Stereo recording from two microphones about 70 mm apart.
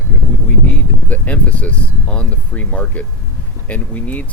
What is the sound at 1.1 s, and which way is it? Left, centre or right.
Speech, left.